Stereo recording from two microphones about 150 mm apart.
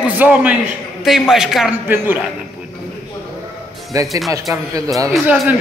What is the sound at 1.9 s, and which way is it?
Speech, 15° right (ahead or behind).